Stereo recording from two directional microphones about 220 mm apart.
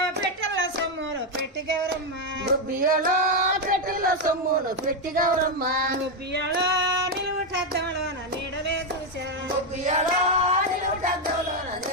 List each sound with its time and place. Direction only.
2.4 s female singing: 40° right (ahead or behind)
7.5 s speech: 45° right (ahead or behind)
9.8 s female singing: 30° right (ahead or behind)